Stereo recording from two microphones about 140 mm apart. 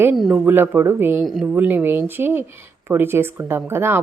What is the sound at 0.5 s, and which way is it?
Speech, 15° right (ahead or behind).